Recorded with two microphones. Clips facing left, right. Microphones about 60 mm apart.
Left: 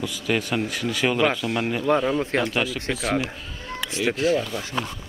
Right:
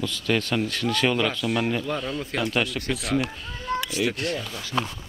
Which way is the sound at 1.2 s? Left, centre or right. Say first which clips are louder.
Left 2 dB; centre.